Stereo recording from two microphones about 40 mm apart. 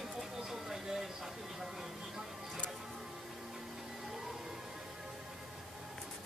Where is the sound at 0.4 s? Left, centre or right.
Centre.